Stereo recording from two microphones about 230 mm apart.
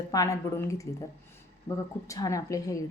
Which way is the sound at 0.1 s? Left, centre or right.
Centre.